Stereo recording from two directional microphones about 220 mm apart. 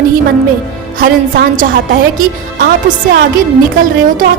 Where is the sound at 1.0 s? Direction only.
40° right (ahead or behind).